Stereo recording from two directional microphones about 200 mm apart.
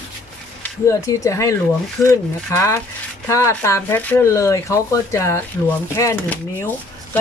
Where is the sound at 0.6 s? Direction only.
15° left (ahead or behind).